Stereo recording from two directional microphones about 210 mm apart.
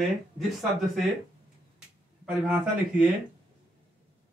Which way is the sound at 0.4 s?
Centre (ahead or behind).